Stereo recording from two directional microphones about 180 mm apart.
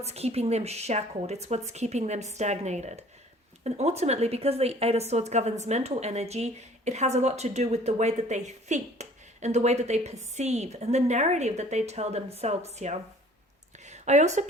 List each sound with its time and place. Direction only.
0.0 s a woman's voice: 35° right (ahead or behind)